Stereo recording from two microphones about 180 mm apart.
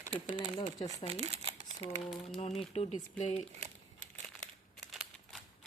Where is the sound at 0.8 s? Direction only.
35° right (ahead or behind).